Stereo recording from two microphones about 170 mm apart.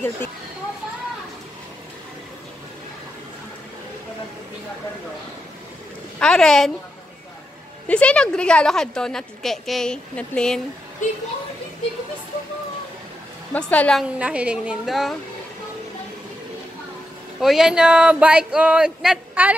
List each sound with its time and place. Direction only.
6.1 s a woman's voice: 5° left (ahead or behind)
7.9 s a woman's voice: 5° left (ahead or behind)
11.0 s speech: 45° left (ahead or behind)
13.5 s a woman's voice: 10° left (ahead or behind)
14.0 s a woman's voice: 5° right (ahead or behind)
17.4 s a woman's voice: centre (ahead or behind)